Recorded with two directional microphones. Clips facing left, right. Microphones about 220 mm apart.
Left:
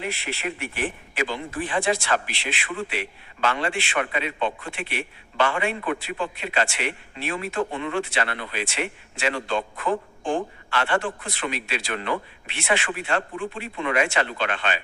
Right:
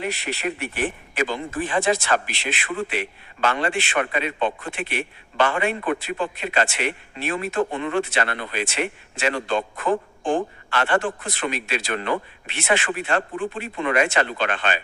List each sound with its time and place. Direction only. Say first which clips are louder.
0.0 s speech: right 3 dB; 40° right (ahead or behind)